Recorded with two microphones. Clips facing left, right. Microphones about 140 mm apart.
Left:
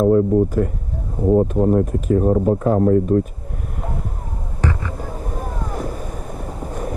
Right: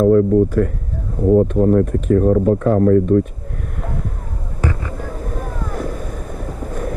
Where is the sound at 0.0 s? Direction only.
20° left (ahead or behind).